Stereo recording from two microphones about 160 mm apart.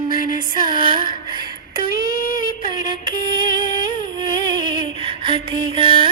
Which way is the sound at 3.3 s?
25° right (ahead or behind).